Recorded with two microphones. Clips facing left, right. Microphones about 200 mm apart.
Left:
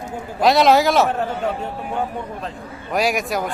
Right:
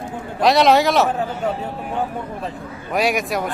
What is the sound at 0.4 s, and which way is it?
Speech, centre (ahead or behind).